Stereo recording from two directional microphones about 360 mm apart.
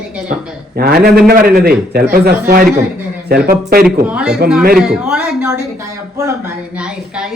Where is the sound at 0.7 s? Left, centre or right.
Right.